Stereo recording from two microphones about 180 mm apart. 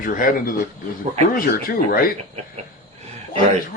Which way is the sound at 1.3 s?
50° left (ahead or behind).